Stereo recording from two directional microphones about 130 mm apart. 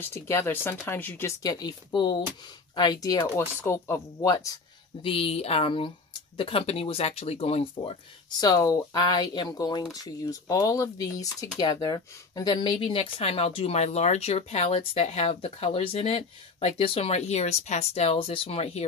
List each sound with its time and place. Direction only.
0.1 s speech: 20° left (ahead or behind)
1.4 s speech: 30° left (ahead or behind)
5.0 s speech: 45° left (ahead or behind)
8.4 s speech: 30° left (ahead or behind); by 18.9 s 55° left (ahead or behind)